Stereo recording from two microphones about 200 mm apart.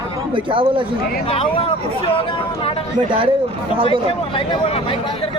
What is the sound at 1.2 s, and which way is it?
Speech, 30° left (ahead or behind).